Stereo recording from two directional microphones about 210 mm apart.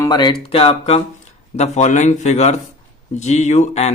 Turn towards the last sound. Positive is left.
turn(degrees=30)  # may be behind; listen again after turning